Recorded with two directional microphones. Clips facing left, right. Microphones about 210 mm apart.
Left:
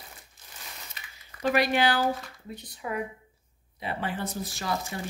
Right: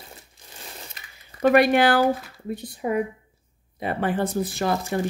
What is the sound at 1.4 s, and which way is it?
Speech, 55° right (ahead or behind).